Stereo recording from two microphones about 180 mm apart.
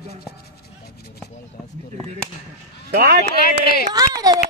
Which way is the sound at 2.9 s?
60° right (ahead or behind).